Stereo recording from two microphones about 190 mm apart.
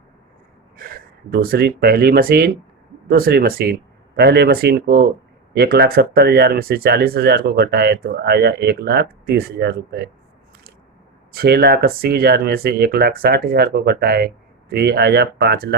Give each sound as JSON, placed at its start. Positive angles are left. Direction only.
{"t": 0.8, "sound": "gasp", "side_deg": -45}
{"t": 1.3, "sound": "speech", "side_deg": -55}
{"t": 11.3, "sound": "speech", "side_deg": -55}